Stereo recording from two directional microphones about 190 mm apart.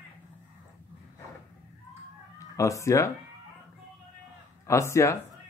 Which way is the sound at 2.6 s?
15° left (ahead or behind).